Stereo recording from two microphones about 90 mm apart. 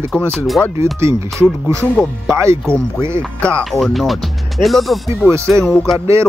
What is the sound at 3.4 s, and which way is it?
Music, 15° left (ahead or behind).